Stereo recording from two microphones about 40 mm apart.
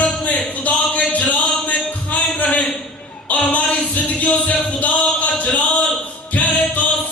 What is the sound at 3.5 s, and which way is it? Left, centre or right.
Music, left.